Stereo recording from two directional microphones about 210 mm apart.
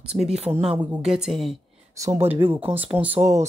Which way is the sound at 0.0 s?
5° right (ahead or behind).